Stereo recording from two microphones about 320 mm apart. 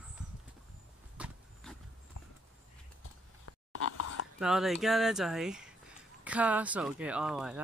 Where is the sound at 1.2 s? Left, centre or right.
Centre.